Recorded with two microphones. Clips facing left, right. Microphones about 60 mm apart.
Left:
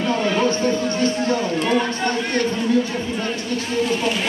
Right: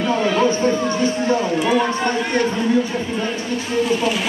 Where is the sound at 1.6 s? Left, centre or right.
Centre.